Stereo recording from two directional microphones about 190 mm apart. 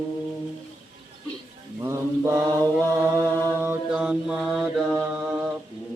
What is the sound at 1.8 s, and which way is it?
Mantra, 15° right (ahead or behind).